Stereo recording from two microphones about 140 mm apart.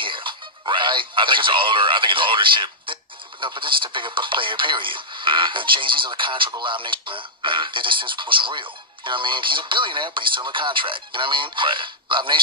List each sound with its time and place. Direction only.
0.0 s speech: 35° right (ahead or behind)